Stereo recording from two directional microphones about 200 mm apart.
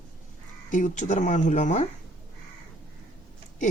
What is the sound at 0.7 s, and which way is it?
Speech, 40° left (ahead or behind).